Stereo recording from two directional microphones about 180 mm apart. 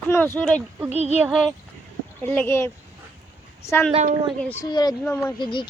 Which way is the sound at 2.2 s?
10° left (ahead or behind).